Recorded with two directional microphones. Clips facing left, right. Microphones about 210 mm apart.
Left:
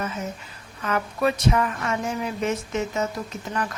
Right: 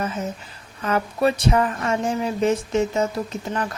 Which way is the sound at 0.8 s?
30° right (ahead or behind).